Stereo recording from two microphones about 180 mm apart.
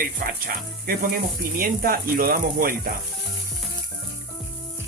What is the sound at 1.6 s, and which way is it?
Speech, 55° right (ahead or behind).